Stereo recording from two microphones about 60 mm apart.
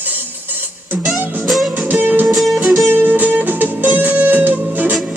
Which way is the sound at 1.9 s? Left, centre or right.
Right.